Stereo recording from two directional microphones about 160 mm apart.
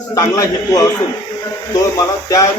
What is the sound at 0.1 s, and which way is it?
Speech, 20° left (ahead or behind).